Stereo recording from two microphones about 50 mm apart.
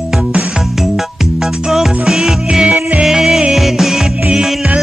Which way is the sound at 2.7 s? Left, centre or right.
Right.